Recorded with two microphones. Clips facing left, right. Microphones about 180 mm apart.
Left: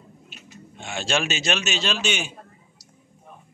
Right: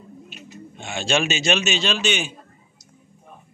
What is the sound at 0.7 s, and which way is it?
A man's voice, 5° left (ahead or behind).